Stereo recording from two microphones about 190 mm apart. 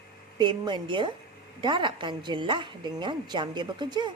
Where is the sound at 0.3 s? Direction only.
25° right (ahead or behind).